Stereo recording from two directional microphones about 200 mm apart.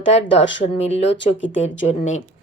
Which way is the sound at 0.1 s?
35° left (ahead or behind).